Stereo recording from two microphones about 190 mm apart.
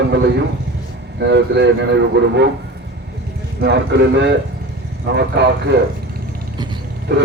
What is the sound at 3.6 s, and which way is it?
A man's voice, 65° right (ahead or behind).